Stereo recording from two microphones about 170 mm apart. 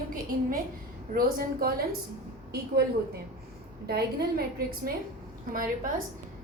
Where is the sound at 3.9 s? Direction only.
65° right (ahead or behind).